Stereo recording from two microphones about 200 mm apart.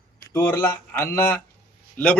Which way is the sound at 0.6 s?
10° left (ahead or behind).